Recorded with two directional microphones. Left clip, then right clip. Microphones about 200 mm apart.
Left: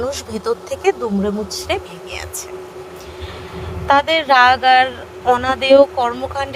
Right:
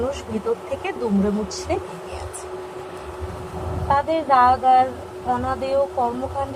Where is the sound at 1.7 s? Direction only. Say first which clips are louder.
Left 4 dB; 50° left (ahead or behind).